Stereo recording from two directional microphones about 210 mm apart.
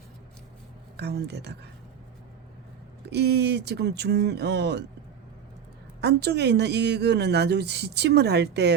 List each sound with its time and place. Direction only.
0.9 s a woman's voice: 50° right (ahead or behind)
3.1 s a woman's voice: 50° right (ahead or behind)
6.0 s a woman's voice: 55° right (ahead or behind)